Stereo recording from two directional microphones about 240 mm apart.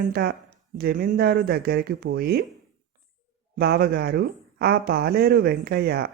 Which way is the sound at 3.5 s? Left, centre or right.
Right.